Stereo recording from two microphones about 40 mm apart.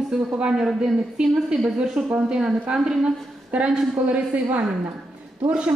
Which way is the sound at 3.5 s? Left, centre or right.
Right.